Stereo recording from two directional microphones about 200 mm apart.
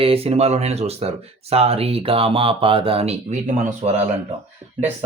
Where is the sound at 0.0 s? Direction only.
30° right (ahead or behind).